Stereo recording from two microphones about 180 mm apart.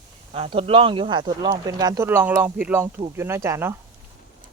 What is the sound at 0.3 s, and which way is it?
Speech, 30° right (ahead or behind).